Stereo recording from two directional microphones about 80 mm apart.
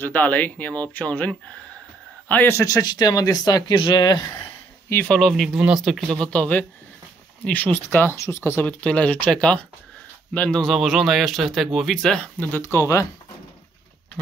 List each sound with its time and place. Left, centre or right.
0.0 s a man's voice: left
2.6 s speech: left
3.7 s speech: left
4.8 s speech: left
5.1 s speech: centre; by 8.2 s left
8.2 s speech: left
8.6 s speech: centre
10.6 s speech: centre
12.6 s speech: left